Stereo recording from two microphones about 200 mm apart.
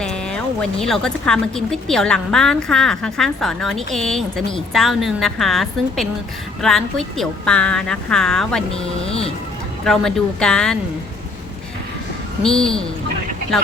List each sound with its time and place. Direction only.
0.3 s a woman's voice: 5° left (ahead or behind)
9.0 s speech: 30° left (ahead or behind)
9.8 s a woman's voice: centre (ahead or behind)
12.4 s a woman's voice: 5° left (ahead or behind)